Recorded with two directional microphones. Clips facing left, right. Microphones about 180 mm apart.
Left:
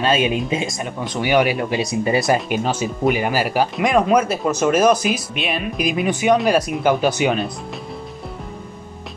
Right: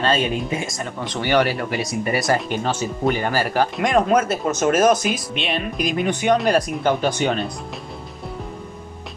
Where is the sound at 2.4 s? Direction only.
10° left (ahead or behind).